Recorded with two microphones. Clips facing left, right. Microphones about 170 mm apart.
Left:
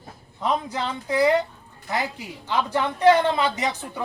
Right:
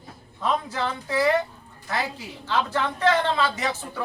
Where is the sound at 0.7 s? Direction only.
20° left (ahead or behind).